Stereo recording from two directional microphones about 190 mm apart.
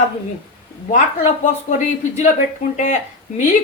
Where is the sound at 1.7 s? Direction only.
40° left (ahead or behind).